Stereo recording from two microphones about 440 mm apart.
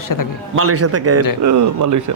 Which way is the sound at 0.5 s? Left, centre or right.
Right.